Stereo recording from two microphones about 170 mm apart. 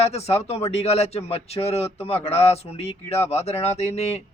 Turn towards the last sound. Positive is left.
turn(degrees=40)  # may be behind; listen again after turning